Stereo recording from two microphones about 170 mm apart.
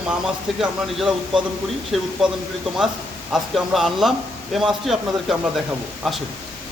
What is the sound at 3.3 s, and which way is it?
A man's voice, centre (ahead or behind).